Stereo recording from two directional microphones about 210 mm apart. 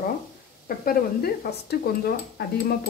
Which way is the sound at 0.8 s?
45° left (ahead or behind).